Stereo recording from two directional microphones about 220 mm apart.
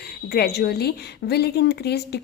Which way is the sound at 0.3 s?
45° left (ahead or behind).